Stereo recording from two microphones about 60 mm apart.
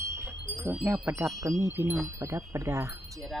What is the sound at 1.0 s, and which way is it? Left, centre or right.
Speech, right.